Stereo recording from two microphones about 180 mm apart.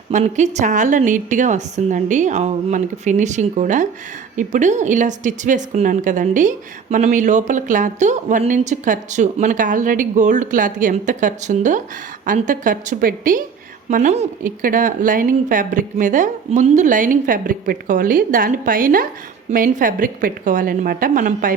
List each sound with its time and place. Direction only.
0.1 s a woman's voice: 40° right (ahead or behind)